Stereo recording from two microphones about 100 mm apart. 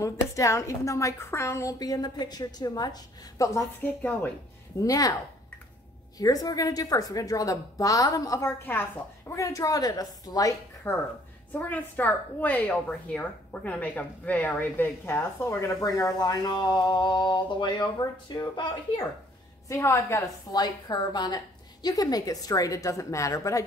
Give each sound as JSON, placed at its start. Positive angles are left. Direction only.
{"t": 0.0, "sound": "a woman's voice", "side_deg": 30}
{"t": 3.4, "sound": "a woman's voice", "side_deg": 30}
{"t": 4.8, "sound": "a woman's voice", "side_deg": 35}
{"t": 6.1, "sound": "a woman's voice", "side_deg": 40}
{"t": 8.5, "sound": "a woman's voice", "side_deg": 20}
{"t": 9.3, "sound": "a woman's voice", "side_deg": 30}
{"t": 10.9, "sound": "a woman's voice", "side_deg": 20}
{"t": 19.7, "sound": "a woman's voice", "side_deg": 30}
{"t": 20.5, "sound": "a woman's voice", "side_deg": 45}